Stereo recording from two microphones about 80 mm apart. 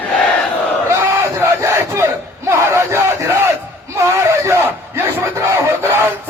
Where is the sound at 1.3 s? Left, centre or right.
Right.